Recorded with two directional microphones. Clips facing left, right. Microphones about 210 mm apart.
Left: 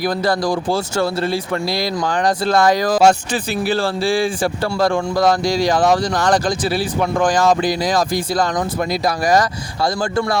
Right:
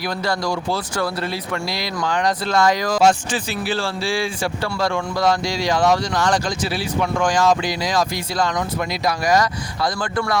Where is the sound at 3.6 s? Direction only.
50° left (ahead or behind).